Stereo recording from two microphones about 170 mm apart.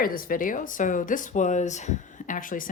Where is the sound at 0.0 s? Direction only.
55° left (ahead or behind).